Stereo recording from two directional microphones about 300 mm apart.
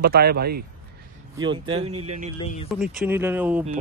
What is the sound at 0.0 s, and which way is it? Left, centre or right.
Speech, right.